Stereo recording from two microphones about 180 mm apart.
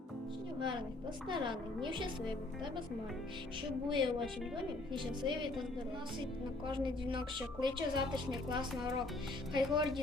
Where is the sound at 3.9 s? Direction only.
25° right (ahead or behind).